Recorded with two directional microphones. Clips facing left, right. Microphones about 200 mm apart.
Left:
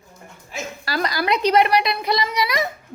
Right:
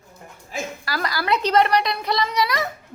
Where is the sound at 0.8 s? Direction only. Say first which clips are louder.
Left 3 dB; 20° left (ahead or behind).